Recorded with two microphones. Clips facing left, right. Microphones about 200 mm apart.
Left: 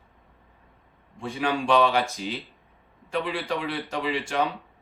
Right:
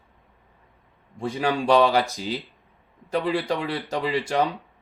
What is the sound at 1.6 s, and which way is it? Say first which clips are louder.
Speech: right 3 dB; 40° right (ahead or behind).